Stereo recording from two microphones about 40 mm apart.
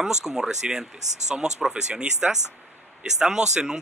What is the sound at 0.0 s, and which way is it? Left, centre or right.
Speech, centre.